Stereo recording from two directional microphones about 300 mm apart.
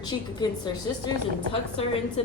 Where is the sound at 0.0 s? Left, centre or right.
Centre.